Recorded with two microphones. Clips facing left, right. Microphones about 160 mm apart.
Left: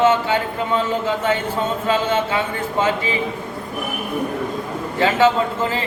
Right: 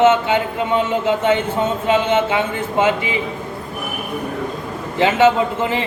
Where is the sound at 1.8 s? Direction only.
20° right (ahead or behind).